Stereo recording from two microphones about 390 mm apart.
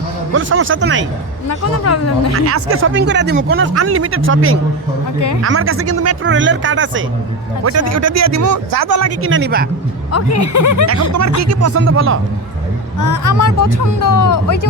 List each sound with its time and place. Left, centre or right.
0.3 s speech: right
1.5 s speech: left
2.4 s speech: right
3.7 s speech: right
8.5 s speech: right
10.1 s speech: left
11.4 s speech: right
13.0 s speech: left